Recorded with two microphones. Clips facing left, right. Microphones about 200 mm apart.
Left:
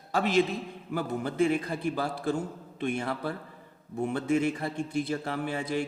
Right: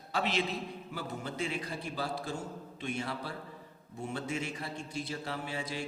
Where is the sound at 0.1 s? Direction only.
45° left (ahead or behind).